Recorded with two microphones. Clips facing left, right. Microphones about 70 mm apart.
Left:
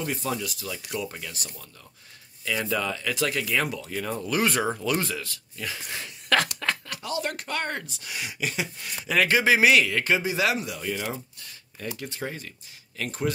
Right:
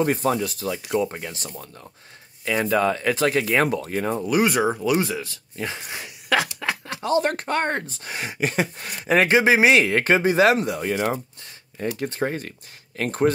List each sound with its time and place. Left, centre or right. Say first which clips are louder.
0.0 s speech: right 8 dB; right
2.4 s speech: right 7 dB; right
4.3 s speech: right 4 dB; centre; by 5.8 s right
5.9 s speech: even; centre
6.9 s speech: right 9 dB; right